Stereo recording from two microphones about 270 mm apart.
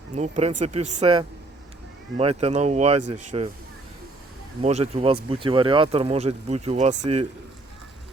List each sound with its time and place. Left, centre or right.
0.2 s speech: right
4.6 s speech: right